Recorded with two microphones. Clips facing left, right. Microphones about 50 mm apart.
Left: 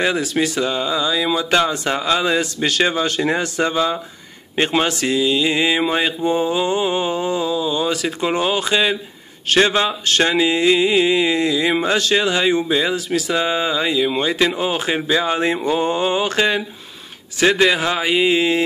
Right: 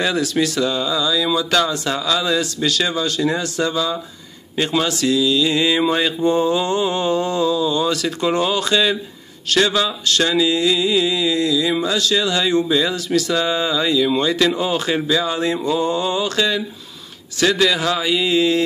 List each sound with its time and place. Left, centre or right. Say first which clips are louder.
0.0 s mantra: even; left
9.5 s mantra: left 2 dB; left
15.0 s speech: left 1 dB; left